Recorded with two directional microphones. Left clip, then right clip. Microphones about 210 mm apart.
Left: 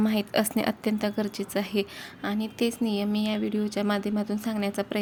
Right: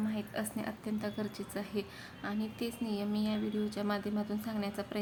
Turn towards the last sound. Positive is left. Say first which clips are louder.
# left 9 dB
turn(degrees=35)  # may be behind; listen again after turning